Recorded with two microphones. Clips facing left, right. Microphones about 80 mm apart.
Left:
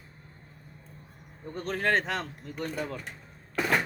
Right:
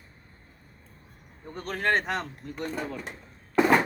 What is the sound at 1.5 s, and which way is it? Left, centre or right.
Speech, right.